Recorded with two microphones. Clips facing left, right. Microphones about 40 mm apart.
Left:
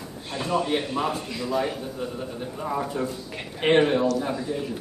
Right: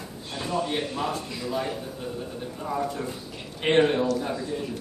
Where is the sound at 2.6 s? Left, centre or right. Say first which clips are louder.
Left 2 dB; centre.